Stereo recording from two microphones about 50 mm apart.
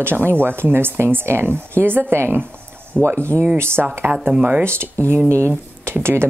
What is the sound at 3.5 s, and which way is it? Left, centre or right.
Speech, right.